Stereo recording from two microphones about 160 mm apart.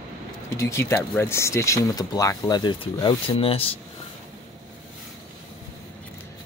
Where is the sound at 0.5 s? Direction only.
20° left (ahead or behind); by 3.7 s 35° left (ahead or behind).